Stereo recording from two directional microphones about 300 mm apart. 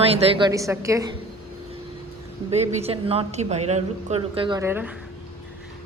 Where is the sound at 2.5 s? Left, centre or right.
Right.